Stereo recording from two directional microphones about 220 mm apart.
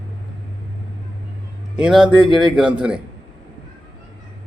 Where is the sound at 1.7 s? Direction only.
5° right (ahead or behind).